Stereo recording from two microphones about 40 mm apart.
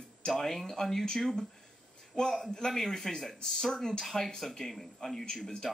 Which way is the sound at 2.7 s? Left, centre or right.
Centre.